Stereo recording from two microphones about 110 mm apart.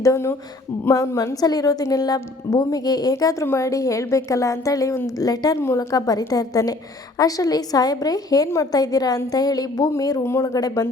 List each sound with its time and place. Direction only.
0.0 s a woman's voice: 25° left (ahead or behind)